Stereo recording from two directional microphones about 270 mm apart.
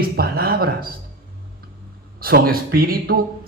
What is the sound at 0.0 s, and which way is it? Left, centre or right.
Speech, right.